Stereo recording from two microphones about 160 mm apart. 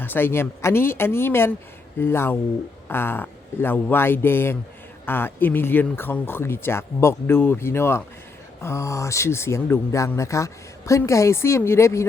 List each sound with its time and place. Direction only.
0.0 s speech: 15° left (ahead or behind)